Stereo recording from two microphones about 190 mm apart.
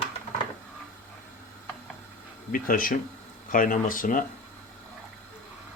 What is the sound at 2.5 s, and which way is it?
Speech, 45° left (ahead or behind).